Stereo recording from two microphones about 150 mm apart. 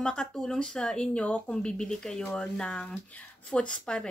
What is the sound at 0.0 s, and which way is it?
Speech, 5° left (ahead or behind).